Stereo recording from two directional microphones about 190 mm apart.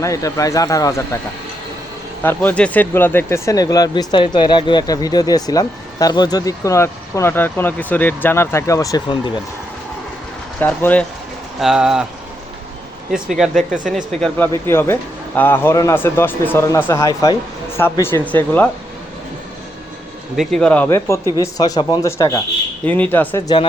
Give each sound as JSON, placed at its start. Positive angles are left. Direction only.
{"t": 0.0, "sound": "speech", "side_deg": 15}
{"t": 2.2, "sound": "speech", "side_deg": 10}
{"t": 10.6, "sound": "speech", "side_deg": 10}
{"t": 11.6, "sound": "speech", "side_deg": -5}
{"t": 13.1, "sound": "speech", "side_deg": 0}
{"t": 20.3, "sound": "speech", "side_deg": 0}